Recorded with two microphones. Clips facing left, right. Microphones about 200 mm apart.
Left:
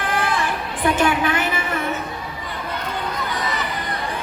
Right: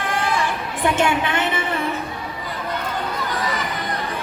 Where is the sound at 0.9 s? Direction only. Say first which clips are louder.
Left 1 dB; 25° right (ahead or behind).